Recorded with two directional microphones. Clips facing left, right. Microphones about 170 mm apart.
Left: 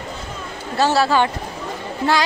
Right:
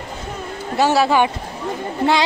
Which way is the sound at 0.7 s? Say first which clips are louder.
Right 1 dB; 15° right (ahead or behind).